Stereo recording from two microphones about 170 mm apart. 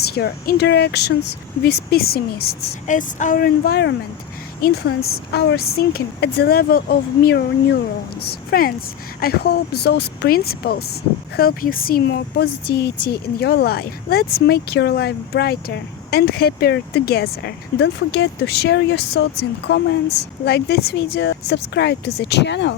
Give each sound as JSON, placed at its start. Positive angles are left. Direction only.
{"t": 0.1, "sound": "speech", "side_deg": 65}
{"t": 2.8, "sound": "speech", "side_deg": 45}
{"t": 4.6, "sound": "speech", "side_deg": 65}